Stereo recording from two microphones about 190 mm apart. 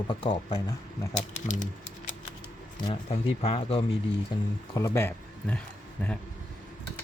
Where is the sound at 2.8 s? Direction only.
30° left (ahead or behind).